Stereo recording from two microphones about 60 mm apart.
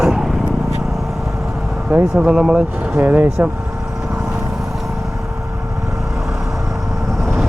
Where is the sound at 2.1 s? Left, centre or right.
Centre.